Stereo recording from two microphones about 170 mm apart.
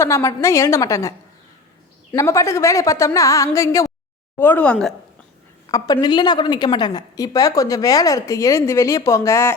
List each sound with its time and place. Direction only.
0.0 s speech: 15° left (ahead or behind)
2.1 s speech: 15° left (ahead or behind)
5.6 s a woman's voice: 20° left (ahead or behind)